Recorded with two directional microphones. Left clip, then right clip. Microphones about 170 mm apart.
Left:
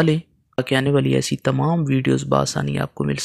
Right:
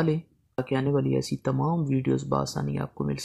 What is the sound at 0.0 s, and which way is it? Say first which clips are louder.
Speech: left 8 dB; 30° left (ahead or behind).